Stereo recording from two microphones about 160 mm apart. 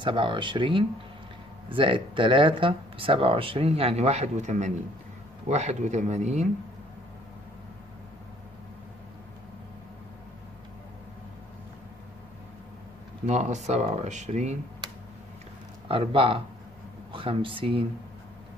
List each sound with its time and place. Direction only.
0.0 s speech: 30° right (ahead or behind); by 6.5 s 45° right (ahead or behind)
13.3 s speech: 45° right (ahead or behind)
15.9 s speech: 35° right (ahead or behind)